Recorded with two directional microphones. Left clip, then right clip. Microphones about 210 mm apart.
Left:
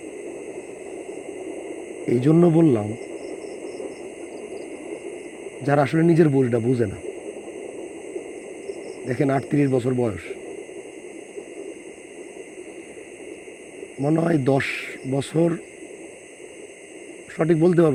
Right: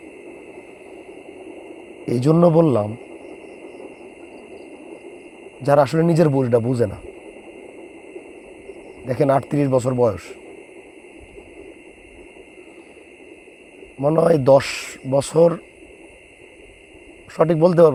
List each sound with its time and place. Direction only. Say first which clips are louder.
2.0 s speech: right 2 dB; 55° right (ahead or behind)
5.6 s speech: right 3 dB; 55° right (ahead or behind)
9.0 s speech: right 5 dB; 55° right (ahead or behind)
14.0 s speech: right 6 dB; 50° right (ahead or behind)
17.3 s speech: right 4 dB; 55° right (ahead or behind)